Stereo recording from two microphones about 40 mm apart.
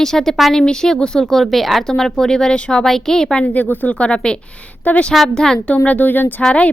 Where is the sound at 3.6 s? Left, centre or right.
Left.